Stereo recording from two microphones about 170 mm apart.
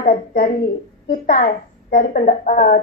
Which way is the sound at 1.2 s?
50° left (ahead or behind).